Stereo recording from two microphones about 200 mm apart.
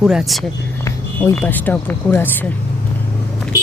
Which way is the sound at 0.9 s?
10° left (ahead or behind).